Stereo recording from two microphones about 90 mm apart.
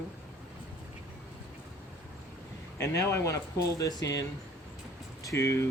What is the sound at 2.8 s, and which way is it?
Speech, 35° left (ahead or behind).